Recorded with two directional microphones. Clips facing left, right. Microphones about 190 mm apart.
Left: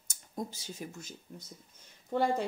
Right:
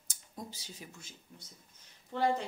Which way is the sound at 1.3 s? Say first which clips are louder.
Left 7 dB; 65° left (ahead or behind).